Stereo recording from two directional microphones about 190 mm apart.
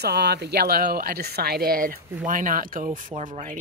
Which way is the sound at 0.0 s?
60° right (ahead or behind).